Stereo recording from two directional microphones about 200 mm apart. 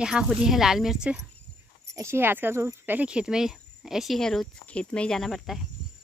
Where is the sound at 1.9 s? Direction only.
10° right (ahead or behind).